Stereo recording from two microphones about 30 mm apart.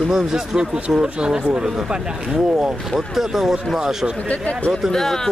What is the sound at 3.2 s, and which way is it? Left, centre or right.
Speech, centre.